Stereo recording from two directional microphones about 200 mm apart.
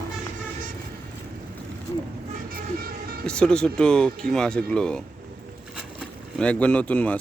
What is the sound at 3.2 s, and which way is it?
Speech, 5° left (ahead or behind).